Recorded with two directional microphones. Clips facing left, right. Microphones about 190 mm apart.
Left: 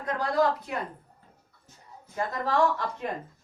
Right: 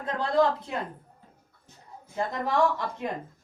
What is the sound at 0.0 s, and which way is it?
Speech, 25° right (ahead or behind).